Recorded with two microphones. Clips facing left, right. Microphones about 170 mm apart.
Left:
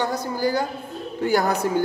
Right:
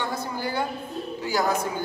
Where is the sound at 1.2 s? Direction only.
60° left (ahead or behind).